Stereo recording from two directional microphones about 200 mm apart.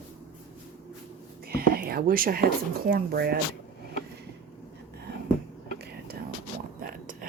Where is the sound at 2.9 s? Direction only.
50° right (ahead or behind).